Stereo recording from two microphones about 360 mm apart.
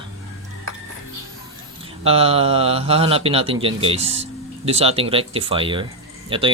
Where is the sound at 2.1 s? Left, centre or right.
Centre.